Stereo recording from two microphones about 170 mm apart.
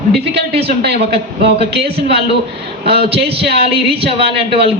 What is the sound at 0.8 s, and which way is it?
Speech, 70° right (ahead or behind).